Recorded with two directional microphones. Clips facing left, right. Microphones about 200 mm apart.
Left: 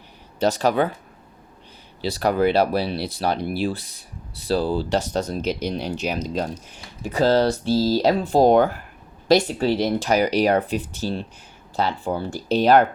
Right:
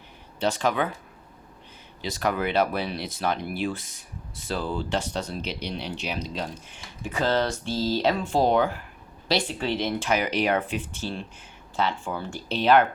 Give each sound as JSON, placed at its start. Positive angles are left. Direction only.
{"t": 0.3, "sound": "speech", "side_deg": 40}
{"t": 2.0, "sound": "speech", "side_deg": 35}